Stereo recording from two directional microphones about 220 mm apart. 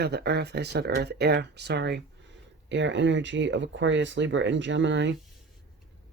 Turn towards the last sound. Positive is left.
turn(degrees=-55)  # may be behind; listen again after turning